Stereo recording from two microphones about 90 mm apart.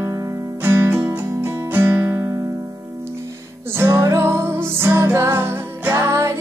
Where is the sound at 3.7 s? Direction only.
25° right (ahead or behind).